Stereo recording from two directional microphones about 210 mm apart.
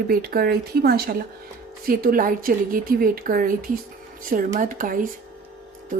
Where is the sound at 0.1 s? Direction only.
45° right (ahead or behind).